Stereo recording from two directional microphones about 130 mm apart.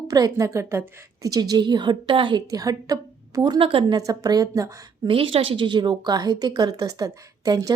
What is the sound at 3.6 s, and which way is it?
Speech, 45° right (ahead or behind).